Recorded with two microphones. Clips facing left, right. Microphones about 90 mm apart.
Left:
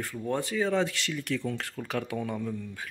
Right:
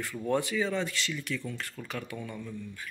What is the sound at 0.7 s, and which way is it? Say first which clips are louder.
Speech: left 4 dB; 75° left (ahead or behind).